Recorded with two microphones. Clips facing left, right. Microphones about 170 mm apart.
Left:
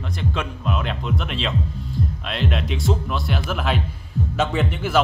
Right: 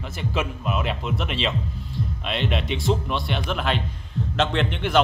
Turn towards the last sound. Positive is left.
turn(degrees=5)  # may be behind; listen again after turning